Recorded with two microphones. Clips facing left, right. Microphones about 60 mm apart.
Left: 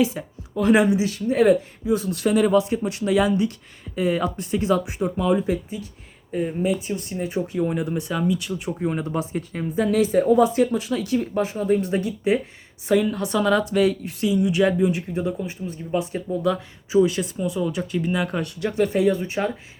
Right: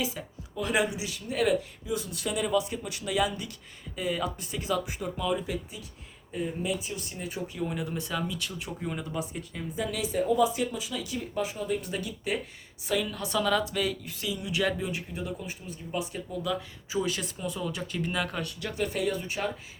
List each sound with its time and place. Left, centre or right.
0.0 s speech: left
16.9 s speech: centre
18.3 s speech: left
19.1 s speech: left